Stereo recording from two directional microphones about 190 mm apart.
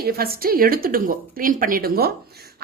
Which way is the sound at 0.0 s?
55° right (ahead or behind).